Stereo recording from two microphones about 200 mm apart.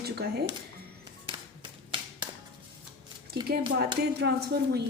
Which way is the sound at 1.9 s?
20° right (ahead or behind).